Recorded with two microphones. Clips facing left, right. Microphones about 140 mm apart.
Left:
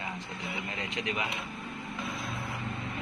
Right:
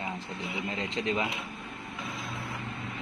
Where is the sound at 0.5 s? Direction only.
25° right (ahead or behind).